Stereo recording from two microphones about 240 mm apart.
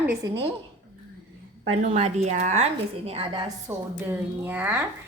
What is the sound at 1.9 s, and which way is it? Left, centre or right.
A woman's voice, right.